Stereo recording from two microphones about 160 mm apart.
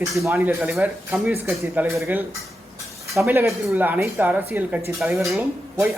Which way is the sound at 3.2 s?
15° right (ahead or behind).